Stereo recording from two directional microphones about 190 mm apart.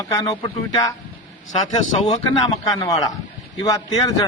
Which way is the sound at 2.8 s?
20° left (ahead or behind).